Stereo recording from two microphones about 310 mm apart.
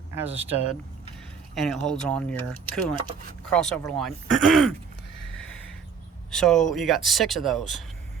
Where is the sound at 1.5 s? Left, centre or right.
Centre.